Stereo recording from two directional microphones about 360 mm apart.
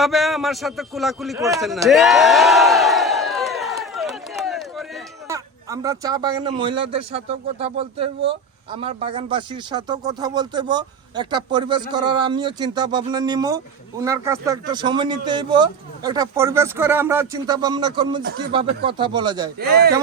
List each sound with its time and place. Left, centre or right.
0.0 s a sound: centre
5.3 s speech: centre
19.5 s speech: right